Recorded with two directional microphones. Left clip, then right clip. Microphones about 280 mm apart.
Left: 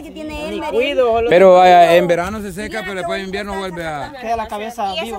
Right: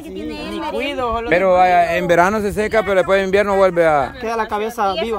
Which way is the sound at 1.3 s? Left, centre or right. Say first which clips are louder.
Left 5 dB; left.